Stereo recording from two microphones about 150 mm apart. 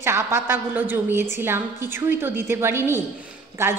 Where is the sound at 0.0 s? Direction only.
15° right (ahead or behind).